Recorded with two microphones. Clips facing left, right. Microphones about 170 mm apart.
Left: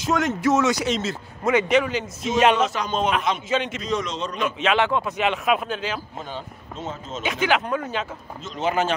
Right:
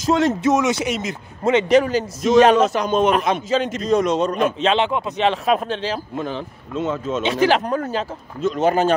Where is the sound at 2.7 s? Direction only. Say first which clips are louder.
Right 6 dB; 50° right (ahead or behind).